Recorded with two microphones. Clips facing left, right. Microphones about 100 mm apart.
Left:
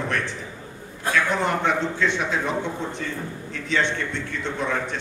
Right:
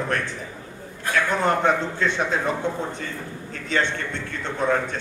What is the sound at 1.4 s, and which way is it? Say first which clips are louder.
Speech: right 2 dB; 40° right (ahead or behind).